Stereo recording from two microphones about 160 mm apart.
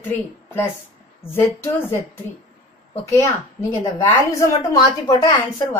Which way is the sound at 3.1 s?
20° left (ahead or behind).